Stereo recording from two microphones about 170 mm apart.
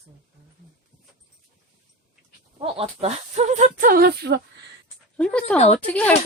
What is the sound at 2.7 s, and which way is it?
Speech, 35° right (ahead or behind).